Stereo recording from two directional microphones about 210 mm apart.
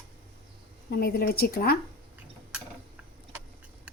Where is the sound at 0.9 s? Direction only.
45° left (ahead or behind).